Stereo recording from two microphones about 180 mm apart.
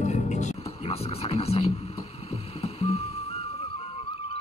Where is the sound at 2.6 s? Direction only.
35° left (ahead or behind).